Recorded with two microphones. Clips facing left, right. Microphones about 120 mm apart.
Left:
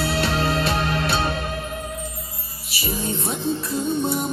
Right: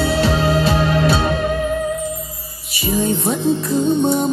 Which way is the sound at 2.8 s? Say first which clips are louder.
Right 8 dB; centre (ahead or behind).